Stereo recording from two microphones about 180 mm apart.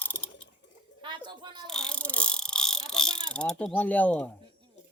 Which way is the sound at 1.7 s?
5° left (ahead or behind).